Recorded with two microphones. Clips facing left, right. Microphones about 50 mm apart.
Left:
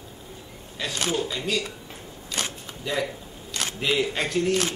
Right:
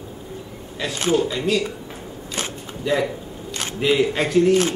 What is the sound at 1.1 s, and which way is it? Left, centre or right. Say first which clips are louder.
Speech: right 10 dB; centre.